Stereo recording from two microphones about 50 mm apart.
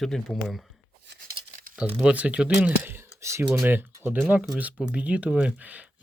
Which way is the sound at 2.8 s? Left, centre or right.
Right.